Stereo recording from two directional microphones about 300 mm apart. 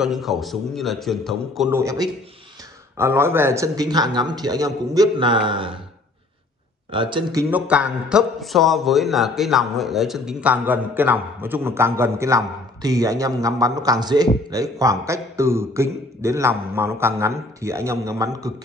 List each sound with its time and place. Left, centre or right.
0.0 s a man's voice: centre
6.9 s a man's voice: centre
7.5 s a man's voice: centre